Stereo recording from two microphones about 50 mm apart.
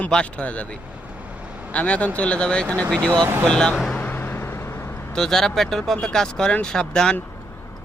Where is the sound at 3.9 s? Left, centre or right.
Left.